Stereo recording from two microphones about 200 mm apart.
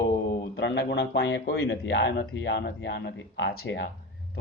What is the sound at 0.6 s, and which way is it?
Speech, 60° left (ahead or behind).